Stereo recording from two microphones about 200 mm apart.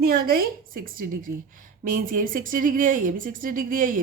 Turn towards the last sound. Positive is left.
turn(degrees=-40)  # may be behind; listen again after turning